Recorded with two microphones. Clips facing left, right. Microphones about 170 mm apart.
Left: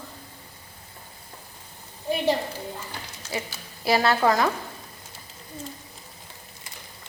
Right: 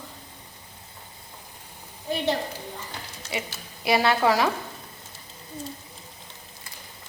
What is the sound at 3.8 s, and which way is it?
Speech, 20° right (ahead or behind).